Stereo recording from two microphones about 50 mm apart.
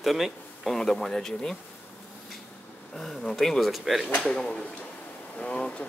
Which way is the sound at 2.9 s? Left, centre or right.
Centre.